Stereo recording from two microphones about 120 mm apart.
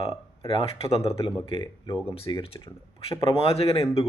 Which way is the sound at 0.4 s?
55° left (ahead or behind).